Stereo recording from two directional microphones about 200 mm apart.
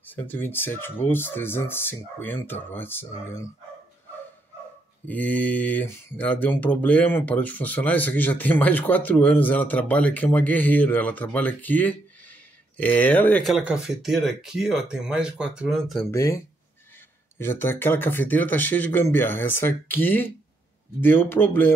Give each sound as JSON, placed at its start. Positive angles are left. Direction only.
{"t": 0.0, "sound": "speech", "side_deg": 10}
{"t": 5.0, "sound": "speech", "side_deg": 10}
{"t": 16.1, "sound": "speech", "side_deg": 15}
{"t": 17.4, "sound": "speech", "side_deg": 10}